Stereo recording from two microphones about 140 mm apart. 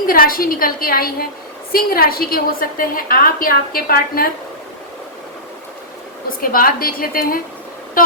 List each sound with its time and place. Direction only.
0.0 s a woman's voice: 90° left
6.4 s a woman's voice: 90° left
8.0 s vehicle: 90° left